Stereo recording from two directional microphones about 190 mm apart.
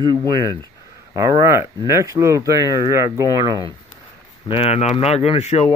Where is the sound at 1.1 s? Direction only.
15° right (ahead or behind).